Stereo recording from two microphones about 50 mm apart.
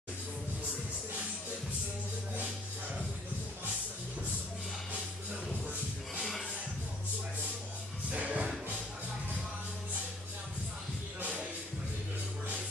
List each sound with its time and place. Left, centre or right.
8.1 s music: right